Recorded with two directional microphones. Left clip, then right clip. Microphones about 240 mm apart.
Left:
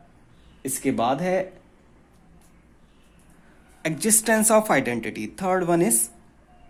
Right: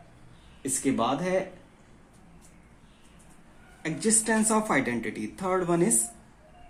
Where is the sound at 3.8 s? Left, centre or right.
Left.